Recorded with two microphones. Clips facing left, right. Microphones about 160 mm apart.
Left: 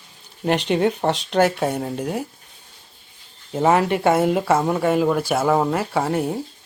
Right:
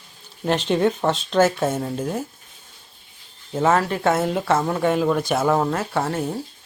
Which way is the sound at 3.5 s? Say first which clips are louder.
Left 2 dB; 10° left (ahead or behind).